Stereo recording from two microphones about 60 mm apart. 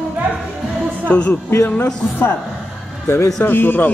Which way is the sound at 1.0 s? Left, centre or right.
Left.